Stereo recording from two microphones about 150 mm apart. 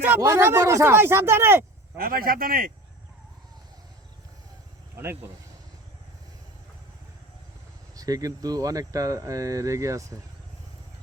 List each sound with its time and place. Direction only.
0.0 s speech: 15° right (ahead or behind)
2.0 s a man's voice: 75° right (ahead or behind)
7.9 s speech: 25° right (ahead or behind)